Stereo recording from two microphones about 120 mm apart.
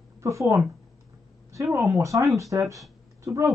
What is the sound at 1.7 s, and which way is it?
Speech, 25° right (ahead or behind).